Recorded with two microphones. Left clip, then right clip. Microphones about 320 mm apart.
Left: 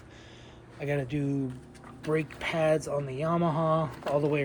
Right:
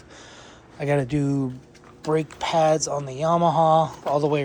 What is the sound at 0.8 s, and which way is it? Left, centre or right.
Speech, right.